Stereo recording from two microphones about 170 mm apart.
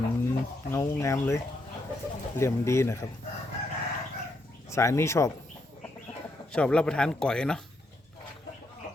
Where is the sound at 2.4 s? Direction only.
15° left (ahead or behind).